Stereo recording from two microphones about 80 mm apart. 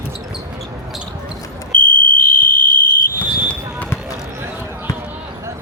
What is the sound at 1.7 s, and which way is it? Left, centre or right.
Smoke detector, centre.